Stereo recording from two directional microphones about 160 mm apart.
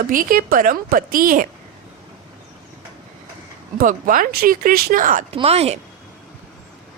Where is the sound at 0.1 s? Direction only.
60° right (ahead or behind).